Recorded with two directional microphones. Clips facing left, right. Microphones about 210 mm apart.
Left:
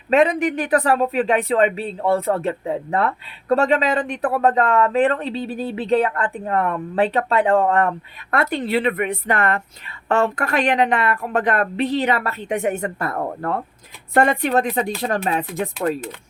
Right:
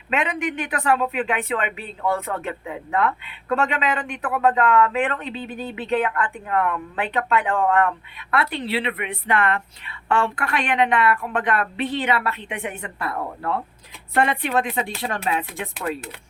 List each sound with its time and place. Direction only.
0.1 s speech: 35° left (ahead or behind)